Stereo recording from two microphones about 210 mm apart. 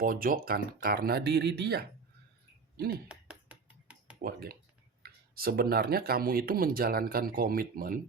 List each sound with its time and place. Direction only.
0.0 s speech: 45° right (ahead or behind)
3.1 s finger snapping: 5° right (ahead or behind)
4.2 s speech: 45° right (ahead or behind)